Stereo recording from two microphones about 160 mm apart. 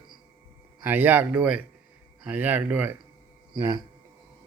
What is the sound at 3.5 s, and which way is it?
Speech, 20° right (ahead or behind).